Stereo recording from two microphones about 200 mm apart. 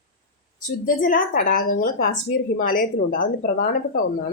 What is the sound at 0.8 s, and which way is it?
A woman's voice, 45° left (ahead or behind).